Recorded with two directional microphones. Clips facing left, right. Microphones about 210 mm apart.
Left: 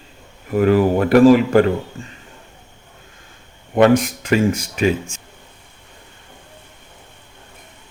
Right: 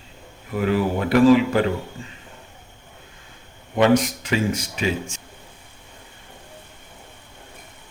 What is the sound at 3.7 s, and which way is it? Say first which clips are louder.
Speech: left 4 dB; 50° left (ahead or behind).